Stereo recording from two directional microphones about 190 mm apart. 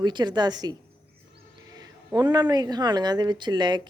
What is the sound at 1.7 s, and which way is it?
A woman's voice, 20° right (ahead or behind).